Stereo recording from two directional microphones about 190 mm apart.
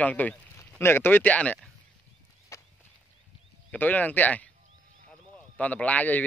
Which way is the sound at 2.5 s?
15° left (ahead or behind).